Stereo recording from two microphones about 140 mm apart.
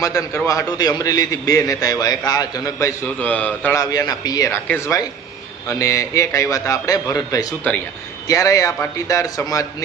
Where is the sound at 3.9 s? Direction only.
25° left (ahead or behind).